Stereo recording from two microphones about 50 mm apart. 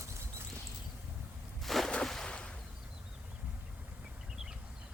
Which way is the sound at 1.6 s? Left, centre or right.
Centre.